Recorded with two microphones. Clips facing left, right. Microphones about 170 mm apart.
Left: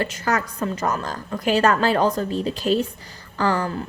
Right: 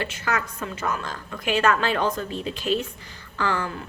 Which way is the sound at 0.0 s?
40° left (ahead or behind).